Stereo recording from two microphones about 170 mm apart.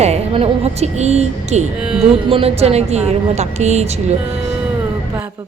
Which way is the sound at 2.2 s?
35° right (ahead or behind).